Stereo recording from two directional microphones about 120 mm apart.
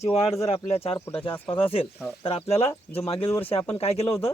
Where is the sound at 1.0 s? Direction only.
20° left (ahead or behind).